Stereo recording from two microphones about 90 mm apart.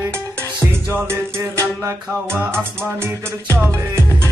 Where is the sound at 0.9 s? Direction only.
30° right (ahead or behind).